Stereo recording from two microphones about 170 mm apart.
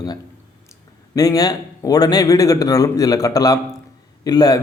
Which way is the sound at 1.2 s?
20° left (ahead or behind).